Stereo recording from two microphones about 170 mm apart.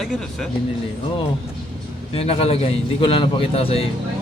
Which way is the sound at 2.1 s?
35° left (ahead or behind).